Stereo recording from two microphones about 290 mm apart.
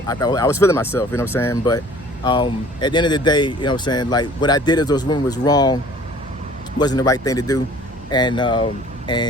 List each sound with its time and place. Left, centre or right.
0.1 s speech: centre